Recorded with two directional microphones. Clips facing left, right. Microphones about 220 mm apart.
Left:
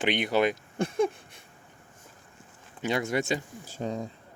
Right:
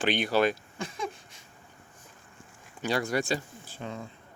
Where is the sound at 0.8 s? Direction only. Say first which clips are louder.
Left 9 dB; 55° left (ahead or behind).